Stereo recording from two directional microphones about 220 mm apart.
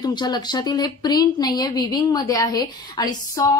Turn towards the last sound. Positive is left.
turn(degrees=15)  # may be behind; listen again after turning